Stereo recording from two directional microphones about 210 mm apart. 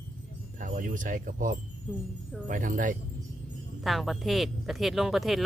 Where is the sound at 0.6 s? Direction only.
40° right (ahead or behind).